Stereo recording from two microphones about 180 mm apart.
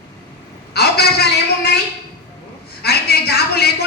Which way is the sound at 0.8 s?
60° left (ahead or behind).